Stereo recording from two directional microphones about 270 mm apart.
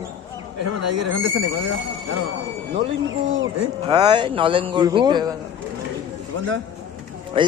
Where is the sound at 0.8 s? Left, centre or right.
Right.